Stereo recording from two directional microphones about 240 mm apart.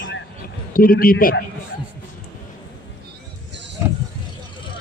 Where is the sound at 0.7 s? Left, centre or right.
Left.